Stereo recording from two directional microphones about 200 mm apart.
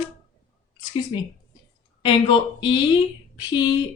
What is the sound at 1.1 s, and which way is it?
A woman's voice, 25° left (ahead or behind).